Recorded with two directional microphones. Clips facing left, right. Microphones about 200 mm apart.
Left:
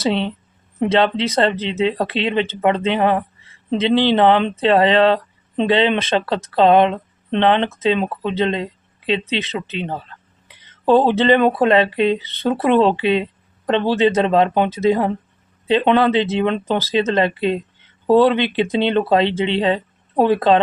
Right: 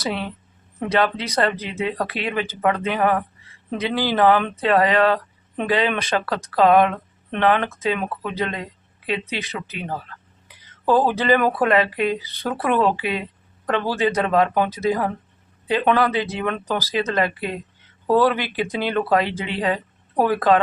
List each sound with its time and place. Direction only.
0.0 s speech: 25° left (ahead or behind)